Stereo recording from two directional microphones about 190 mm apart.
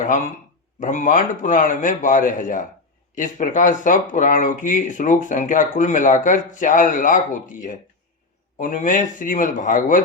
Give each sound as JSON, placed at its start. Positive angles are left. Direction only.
{"t": 0.8, "sound": "speech", "side_deg": 40}